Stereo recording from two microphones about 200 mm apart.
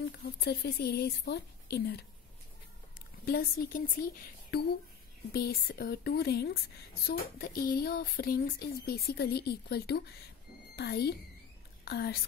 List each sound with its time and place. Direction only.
0.0 s a woman's voice: 55° left (ahead or behind)
3.3 s a woman's voice: 50° left (ahead or behind)